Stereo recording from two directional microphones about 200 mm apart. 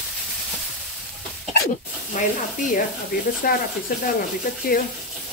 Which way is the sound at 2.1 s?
40° left (ahead or behind).